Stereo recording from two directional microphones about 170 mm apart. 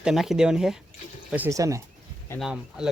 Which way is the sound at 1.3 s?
15° right (ahead or behind).